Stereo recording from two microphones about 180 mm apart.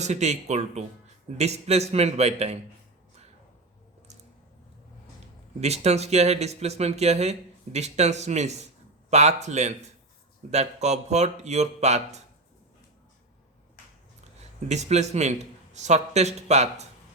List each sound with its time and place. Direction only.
0.0 s speech: 40° right (ahead or behind)
5.5 s speech: 35° right (ahead or behind)
14.7 s speech: 40° right (ahead or behind)